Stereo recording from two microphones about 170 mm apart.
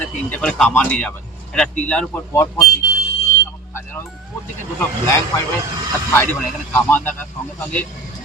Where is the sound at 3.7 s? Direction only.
15° left (ahead or behind).